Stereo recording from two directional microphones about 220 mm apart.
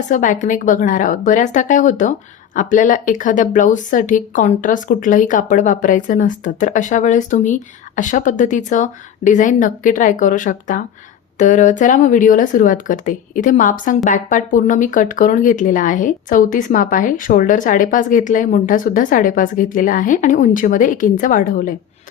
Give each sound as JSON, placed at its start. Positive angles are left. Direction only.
{"t": 0.1, "sound": "speech", "side_deg": 35}